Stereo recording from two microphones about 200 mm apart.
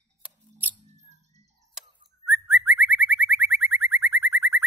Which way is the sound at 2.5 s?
10° right (ahead or behind).